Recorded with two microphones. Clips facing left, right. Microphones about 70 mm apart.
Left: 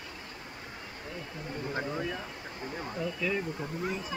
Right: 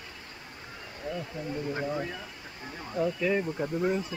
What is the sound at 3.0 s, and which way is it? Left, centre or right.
Speech, right.